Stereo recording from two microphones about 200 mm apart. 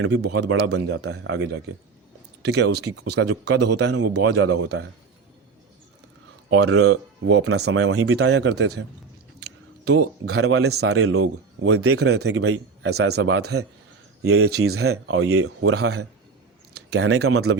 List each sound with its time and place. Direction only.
0.0 s a man's voice: 55° right (ahead or behind); by 3.1 s 90° right
3.1 s a man's voice: 55° right (ahead or behind)
6.6 s speech: 90° right; by 8.8 s 55° right (ahead or behind)
9.8 s speech: 90° right
11.9 s a man's voice: 55° right (ahead or behind)
12.2 s a man's voice: 75° right (ahead or behind)
13.0 s speech: 90° right
16.9 s speech: 90° right